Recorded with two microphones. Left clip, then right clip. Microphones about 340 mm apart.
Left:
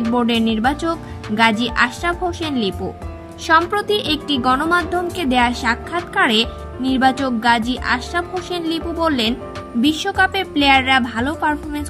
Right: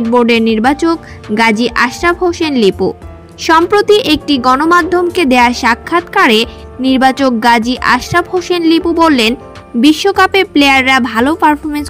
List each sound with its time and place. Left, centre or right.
0.1 s speech: centre